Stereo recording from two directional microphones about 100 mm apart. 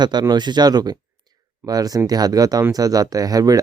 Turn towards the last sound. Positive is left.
turn(degrees=-40)  # may be behind; listen again after turning